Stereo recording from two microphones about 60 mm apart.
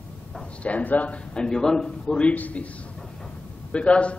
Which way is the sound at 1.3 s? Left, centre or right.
Centre.